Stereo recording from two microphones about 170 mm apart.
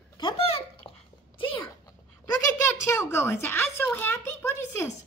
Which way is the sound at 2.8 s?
15° left (ahead or behind).